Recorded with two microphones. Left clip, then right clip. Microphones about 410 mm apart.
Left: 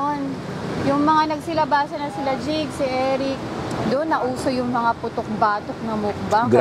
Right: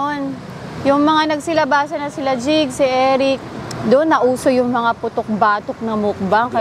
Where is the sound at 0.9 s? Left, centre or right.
Right.